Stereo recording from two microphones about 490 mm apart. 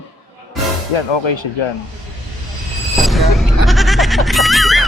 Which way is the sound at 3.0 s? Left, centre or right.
Centre.